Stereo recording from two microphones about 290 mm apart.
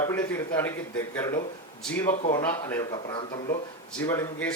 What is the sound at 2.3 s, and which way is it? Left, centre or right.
Speech, centre.